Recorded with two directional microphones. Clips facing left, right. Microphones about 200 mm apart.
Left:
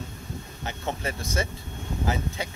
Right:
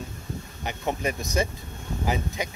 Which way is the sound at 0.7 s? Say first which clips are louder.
Right 3 dB; 15° right (ahead or behind).